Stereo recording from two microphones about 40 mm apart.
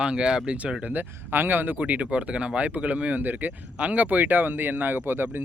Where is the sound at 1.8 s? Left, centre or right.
Right.